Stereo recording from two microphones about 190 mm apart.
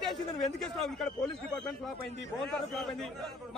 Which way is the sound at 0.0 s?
Centre (ahead or behind).